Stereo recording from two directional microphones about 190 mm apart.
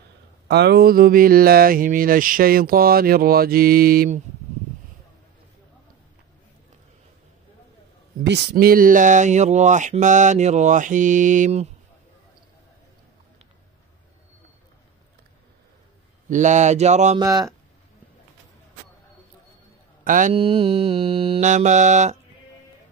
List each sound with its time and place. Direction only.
0.5 s a sound: 60° right (ahead or behind)
8.2 s speech: 60° right (ahead or behind); by 11.7 s 40° right (ahead or behind)
16.3 s speech: 40° right (ahead or behind)
17.2 s speech: 15° right (ahead or behind)
20.0 s a man's voice: 45° right (ahead or behind)
20.3 s speech: 30° right (ahead or behind)